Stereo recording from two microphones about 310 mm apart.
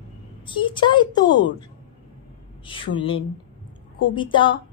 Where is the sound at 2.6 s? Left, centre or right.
Centre.